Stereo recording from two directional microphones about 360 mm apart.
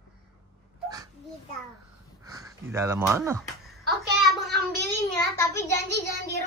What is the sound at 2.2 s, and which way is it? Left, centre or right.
Speech, centre.